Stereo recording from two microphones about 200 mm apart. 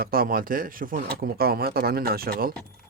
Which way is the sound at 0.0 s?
45° right (ahead or behind).